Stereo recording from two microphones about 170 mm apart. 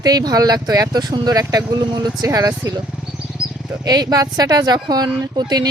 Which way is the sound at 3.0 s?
5° right (ahead or behind).